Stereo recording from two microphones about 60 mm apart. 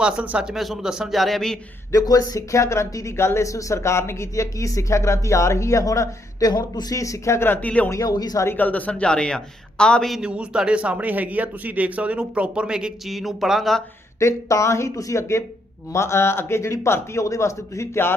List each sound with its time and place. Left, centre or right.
0.0 s speech: centre
0.5 s a man's voice: centre
1.9 s speech: left
7.3 s speech: left
7.6 s a man's voice: left
7.9 s speech: left
8.5 s a man's voice: left
10.2 s speech: centre
13.1 s a man's voice: centre
14.2 s a man's voice: left